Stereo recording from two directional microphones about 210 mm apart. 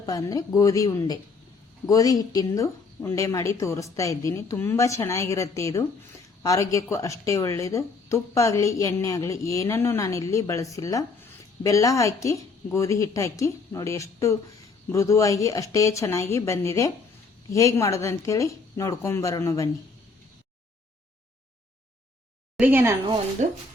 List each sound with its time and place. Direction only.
0.0 s speech: 15° left (ahead or behind)
22.5 s speech: 10° right (ahead or behind)
23.4 s speech: 35° right (ahead or behind)